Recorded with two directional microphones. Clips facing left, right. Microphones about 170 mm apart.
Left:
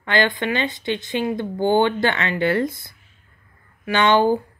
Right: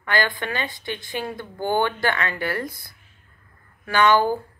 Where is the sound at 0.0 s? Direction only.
25° left (ahead or behind).